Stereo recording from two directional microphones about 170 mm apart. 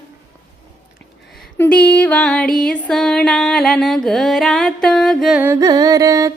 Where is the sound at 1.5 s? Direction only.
10° left (ahead or behind).